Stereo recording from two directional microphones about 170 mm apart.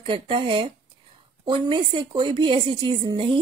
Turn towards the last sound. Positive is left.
turn(degrees=-30)  # may be behind; listen again after turning